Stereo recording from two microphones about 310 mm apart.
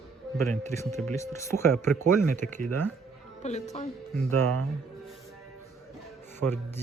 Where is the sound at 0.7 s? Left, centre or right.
Centre.